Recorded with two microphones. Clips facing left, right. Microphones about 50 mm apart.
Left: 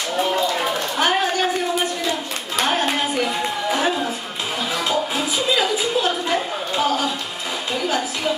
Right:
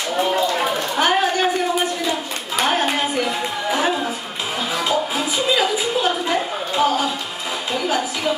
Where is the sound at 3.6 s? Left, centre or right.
Centre.